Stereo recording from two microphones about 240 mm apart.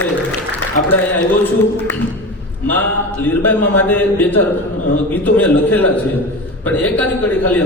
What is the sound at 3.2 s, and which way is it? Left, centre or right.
A man's voice, centre.